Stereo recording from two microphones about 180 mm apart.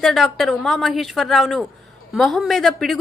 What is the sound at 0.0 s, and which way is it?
A woman's voice, centre (ahead or behind).